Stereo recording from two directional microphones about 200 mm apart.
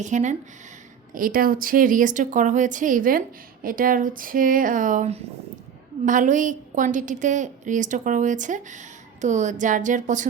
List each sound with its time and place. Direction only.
0.0 s a woman's voice: 35° right (ahead or behind)